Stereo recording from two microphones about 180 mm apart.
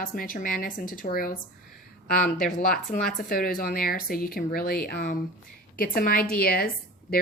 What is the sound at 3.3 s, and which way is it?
Speech, 55° left (ahead or behind).